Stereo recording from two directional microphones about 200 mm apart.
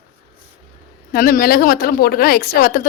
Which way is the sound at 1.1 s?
45° left (ahead or behind).